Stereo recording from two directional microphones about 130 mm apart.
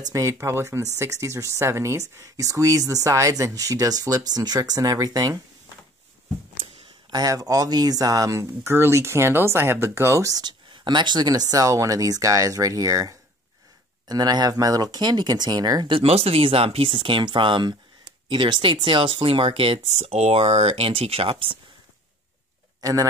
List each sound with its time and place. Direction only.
0.1 s speech: 25° right (ahead or behind)
7.1 s speech: 30° right (ahead or behind)
16.0 s speech: 50° right (ahead or behind)
22.8 s speech: 25° right (ahead or behind)